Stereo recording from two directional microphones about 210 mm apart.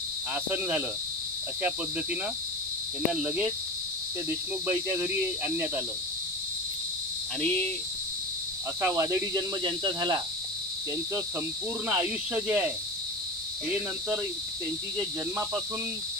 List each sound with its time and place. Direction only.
0.3 s speech: 5° right (ahead or behind)
3.1 s speech: 5° right (ahead or behind)
8.8 s speech: 10° right (ahead or behind)
11.9 s speech: 10° right (ahead or behind)
15.0 s speech: 10° right (ahead or behind)